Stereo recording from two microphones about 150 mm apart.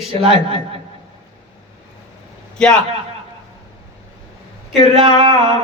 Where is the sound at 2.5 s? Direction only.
5° left (ahead or behind).